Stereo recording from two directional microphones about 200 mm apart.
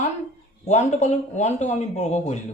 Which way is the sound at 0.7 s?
35° left (ahead or behind).